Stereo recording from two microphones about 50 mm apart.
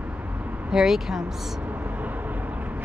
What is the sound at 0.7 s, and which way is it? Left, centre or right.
Speech, centre.